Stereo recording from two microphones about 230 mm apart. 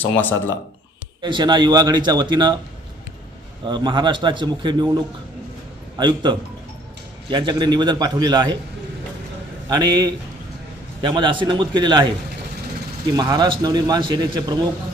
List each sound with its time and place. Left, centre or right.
0.0 s speech: centre
1.2 s speech: centre
3.7 s speech: centre
6.0 s speech: centre
9.6 s a man's voice: centre
13.1 s speech: centre